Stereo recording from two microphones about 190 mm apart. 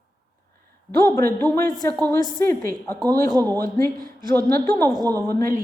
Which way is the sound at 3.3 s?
20° right (ahead or behind).